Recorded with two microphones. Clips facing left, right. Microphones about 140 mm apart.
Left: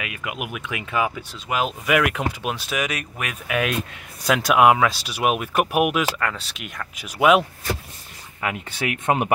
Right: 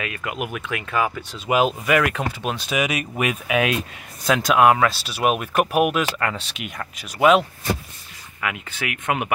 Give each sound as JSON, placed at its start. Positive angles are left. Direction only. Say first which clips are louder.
{"t": 0.0, "sound": "speech", "louder": "right 3 dB", "side_deg": 10}
{"t": 1.5, "sound": "speech", "louder": "right 5 dB", "side_deg": -15}
{"t": 1.9, "sound": "speech", "louder": "right 1 dB", "side_deg": 5}
{"t": 2.8, "sound": "speech", "louder": "right 5 dB", "side_deg": -10}
{"t": 4.3, "sound": "speech", "louder": "even", "side_deg": 5}
{"t": 6.1, "sound": "speech", "louder": "right 1 dB", "side_deg": -5}
{"t": 7.0, "sound": "speech", "louder": "right 1 dB", "side_deg": 10}
{"t": 8.4, "sound": "speech", "louder": "left 2 dB", "side_deg": 30}